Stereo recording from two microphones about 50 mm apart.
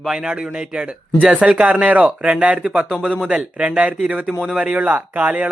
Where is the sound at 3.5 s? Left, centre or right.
Right.